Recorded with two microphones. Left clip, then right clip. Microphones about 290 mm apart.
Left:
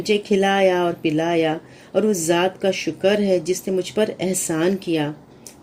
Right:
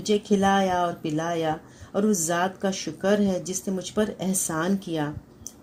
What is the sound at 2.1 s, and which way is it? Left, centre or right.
Speech, right.